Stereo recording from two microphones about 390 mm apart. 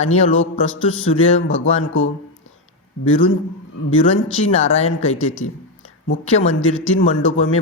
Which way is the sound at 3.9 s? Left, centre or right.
Left.